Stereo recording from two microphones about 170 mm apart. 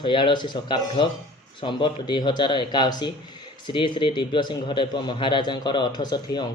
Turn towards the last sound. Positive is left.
turn(degrees=25)  # may be behind; listen again after turning